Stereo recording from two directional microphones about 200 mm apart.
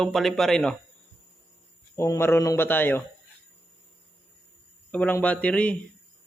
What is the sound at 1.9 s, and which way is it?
Speech, 15° left (ahead or behind).